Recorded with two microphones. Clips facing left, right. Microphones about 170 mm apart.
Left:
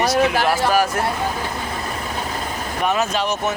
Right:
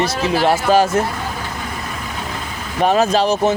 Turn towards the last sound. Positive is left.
turn(degrees=-35)  # may be behind; listen again after turning